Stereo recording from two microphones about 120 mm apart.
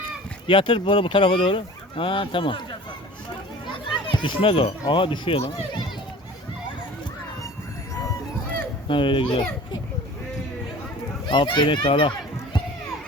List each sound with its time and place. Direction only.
0.4 s speech: 45° left (ahead or behind)
3.8 s speech: 45° left (ahead or behind)
8.9 s speech: 45° left (ahead or behind)
11.3 s a child's voice: 40° left (ahead or behind)